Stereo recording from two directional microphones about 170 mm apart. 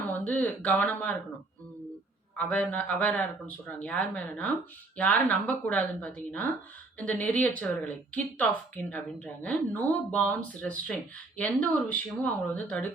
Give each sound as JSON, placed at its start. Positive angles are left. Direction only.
{"t": 0.1, "sound": "speech", "side_deg": 10}
{"t": 2.3, "sound": "speech", "side_deg": 10}